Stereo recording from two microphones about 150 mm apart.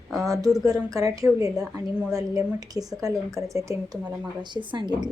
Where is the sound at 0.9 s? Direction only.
25° right (ahead or behind).